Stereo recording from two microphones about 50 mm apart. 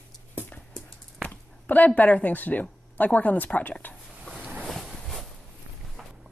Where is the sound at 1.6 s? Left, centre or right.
Left.